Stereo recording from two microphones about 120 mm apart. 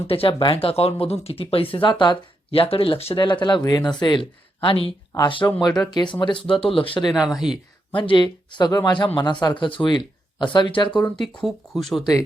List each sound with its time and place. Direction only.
0.1 s speech: 50° left (ahead or behind)
2.5 s speech: 50° left (ahead or behind)
3.2 s speech: 40° left (ahead or behind)
5.5 s speech: 35° left (ahead or behind)
7.1 s speech: centre (ahead or behind)
7.9 s speech: 40° left (ahead or behind)
11.4 s speech: centre (ahead or behind)